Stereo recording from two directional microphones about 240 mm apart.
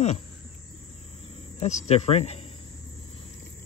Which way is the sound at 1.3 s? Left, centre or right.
Left.